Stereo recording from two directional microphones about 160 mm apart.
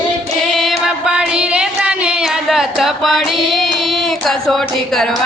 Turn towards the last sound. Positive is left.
turn(degrees=0)  # may be behind; listen again after turning